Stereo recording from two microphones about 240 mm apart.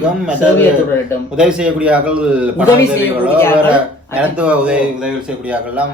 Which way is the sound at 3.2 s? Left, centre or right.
Centre.